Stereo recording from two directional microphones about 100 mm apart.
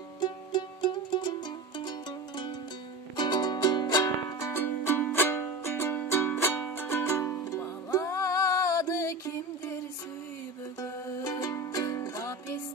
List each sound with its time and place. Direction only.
0.2 s music: 45° left (ahead or behind)
4.5 s music: 25° left (ahead or behind)
10.8 s music: 40° left (ahead or behind)